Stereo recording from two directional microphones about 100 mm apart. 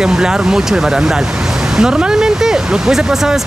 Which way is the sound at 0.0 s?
5° right (ahead or behind).